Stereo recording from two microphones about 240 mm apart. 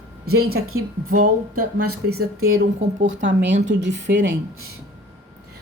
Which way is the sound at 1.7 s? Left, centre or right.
Right.